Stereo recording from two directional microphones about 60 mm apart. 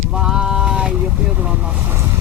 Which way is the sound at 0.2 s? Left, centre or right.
Centre.